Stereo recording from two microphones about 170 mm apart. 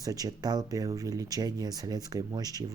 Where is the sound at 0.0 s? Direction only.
20° right (ahead or behind).